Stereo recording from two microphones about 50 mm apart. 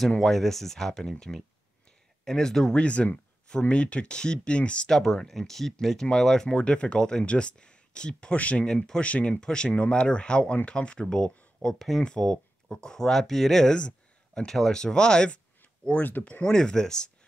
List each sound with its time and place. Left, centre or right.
0.2 s speech: centre
2.2 s speech: centre
2.7 s speech: left
4.8 s speech: centre; by 8.6 s left
8.6 s speech: centre
9.0 s speech: left
16.0 s speech: left
16.4 s speech: centre